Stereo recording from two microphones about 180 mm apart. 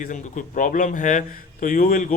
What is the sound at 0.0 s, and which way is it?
Speech, 45° left (ahead or behind).